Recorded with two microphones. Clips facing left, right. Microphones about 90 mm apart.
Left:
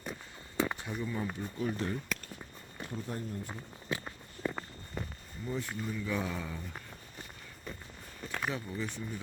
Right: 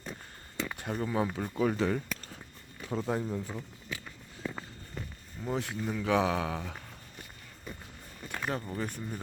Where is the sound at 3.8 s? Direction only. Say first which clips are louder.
Left 4 dB; 35° left (ahead or behind).